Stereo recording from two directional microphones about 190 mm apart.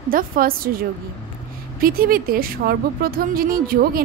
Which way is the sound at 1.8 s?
50° right (ahead or behind).